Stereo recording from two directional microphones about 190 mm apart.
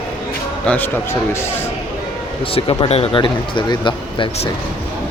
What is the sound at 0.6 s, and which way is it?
Speech, 10° left (ahead or behind).